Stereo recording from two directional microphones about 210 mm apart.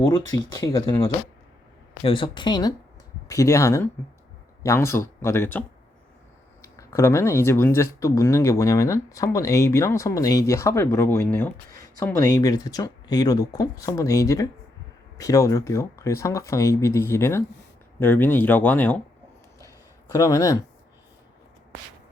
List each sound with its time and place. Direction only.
0.0 s speech: 15° left (ahead or behind)
2.0 s speech: 25° left (ahead or behind); by 19.0 s 10° left (ahead or behind)
20.1 s speech: 15° left (ahead or behind)